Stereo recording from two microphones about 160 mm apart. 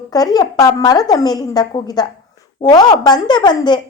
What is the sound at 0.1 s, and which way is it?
A woman's voice, 25° left (ahead or behind).